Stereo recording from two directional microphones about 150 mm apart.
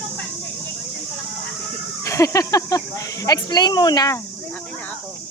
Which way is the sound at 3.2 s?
25° left (ahead or behind).